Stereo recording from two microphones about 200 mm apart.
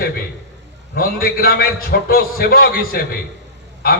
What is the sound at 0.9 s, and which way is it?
A man's voice, 45° left (ahead or behind).